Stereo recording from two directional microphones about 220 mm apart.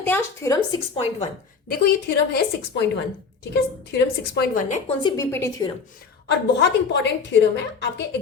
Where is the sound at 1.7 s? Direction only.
45° left (ahead or behind).